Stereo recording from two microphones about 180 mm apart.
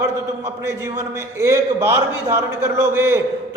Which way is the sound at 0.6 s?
15° right (ahead or behind).